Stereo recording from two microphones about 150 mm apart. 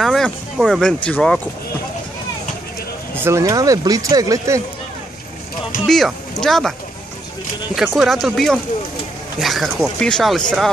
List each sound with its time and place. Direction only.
0.0 s speech: centre (ahead or behind)
3.2 s speech: 20° right (ahead or behind)
5.9 s speech: centre (ahead or behind)
7.7 s speech: centre (ahead or behind)